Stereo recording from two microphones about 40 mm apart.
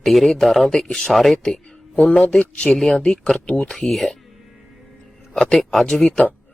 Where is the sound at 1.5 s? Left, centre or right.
Left.